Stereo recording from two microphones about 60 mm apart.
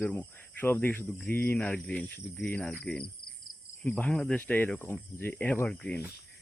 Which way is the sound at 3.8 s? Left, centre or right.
Left.